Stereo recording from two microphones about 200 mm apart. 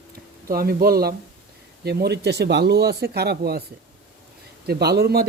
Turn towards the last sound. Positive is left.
turn(degrees=-55)  # may be behind; listen again after turning